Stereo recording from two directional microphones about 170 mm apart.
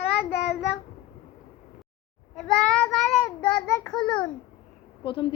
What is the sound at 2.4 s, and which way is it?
A child's voice, 5° left (ahead or behind).